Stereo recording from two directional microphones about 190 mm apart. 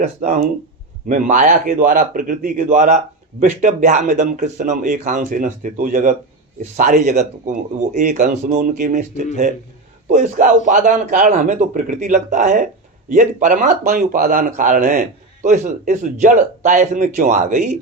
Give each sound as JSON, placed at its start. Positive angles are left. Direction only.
{"t": 0.2, "sound": "a man's voice", "side_deg": -45}